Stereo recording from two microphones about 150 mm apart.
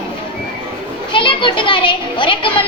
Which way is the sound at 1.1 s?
35° left (ahead or behind).